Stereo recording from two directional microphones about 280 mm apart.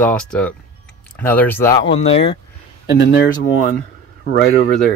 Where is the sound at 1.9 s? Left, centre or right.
Left.